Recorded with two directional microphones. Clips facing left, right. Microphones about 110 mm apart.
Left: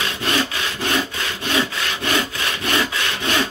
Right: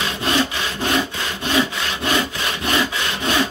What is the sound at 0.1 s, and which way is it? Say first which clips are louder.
Sawing: right 2 dB; 15° right (ahead or behind).